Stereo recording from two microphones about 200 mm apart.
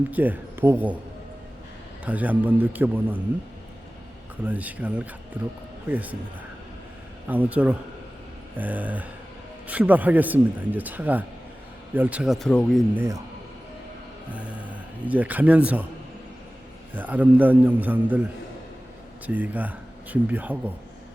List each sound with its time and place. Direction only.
0.1 s speech: 10° right (ahead or behind)
2.0 s speech: 10° right (ahead or behind)
4.4 s speech: 10° right (ahead or behind)
7.3 s speech: 10° right (ahead or behind)
12.9 s speech: 10° right (ahead or behind)
14.3 s speech: 5° right (ahead or behind)
16.9 s speech: 10° right (ahead or behind)